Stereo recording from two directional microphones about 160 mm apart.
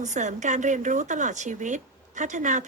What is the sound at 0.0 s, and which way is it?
Speech, 50° right (ahead or behind).